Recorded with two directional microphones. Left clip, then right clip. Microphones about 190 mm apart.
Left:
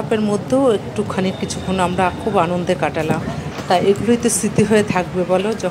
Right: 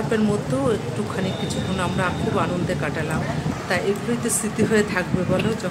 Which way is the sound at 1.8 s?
25° left (ahead or behind).